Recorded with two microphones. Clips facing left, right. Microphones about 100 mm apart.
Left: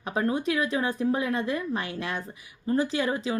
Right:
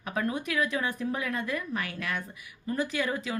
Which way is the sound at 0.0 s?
30° left (ahead or behind).